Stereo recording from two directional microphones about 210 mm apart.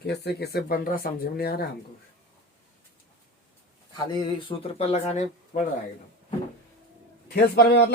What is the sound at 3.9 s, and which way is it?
Speech, 20° left (ahead or behind).